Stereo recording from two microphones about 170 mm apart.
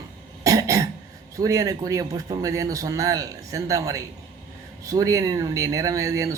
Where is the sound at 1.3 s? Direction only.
20° right (ahead or behind).